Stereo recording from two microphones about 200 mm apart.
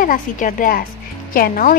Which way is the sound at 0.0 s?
40° left (ahead or behind).